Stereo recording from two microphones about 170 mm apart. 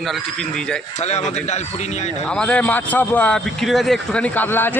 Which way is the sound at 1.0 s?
40° left (ahead or behind).